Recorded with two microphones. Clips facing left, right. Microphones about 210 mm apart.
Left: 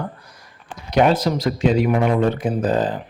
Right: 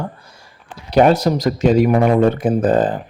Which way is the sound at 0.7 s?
35° right (ahead or behind).